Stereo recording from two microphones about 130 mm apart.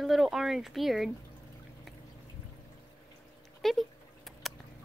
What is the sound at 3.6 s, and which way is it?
Dog, centre (ahead or behind).